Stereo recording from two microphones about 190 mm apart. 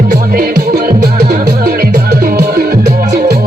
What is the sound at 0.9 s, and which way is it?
Music, 40° right (ahead or behind).